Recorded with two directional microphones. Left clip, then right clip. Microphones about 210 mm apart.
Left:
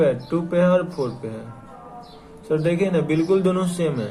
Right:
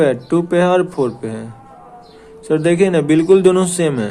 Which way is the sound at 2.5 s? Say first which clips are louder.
Right 7 dB; 50° right (ahead or behind).